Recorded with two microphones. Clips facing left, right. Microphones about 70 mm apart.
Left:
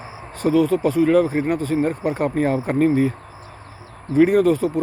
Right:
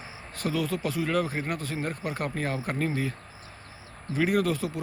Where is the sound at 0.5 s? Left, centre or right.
Left.